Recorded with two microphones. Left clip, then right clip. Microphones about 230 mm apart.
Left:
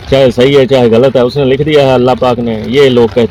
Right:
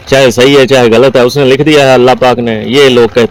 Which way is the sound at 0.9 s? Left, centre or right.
Right.